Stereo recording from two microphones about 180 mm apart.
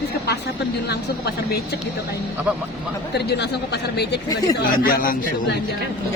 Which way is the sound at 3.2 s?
65° left (ahead or behind).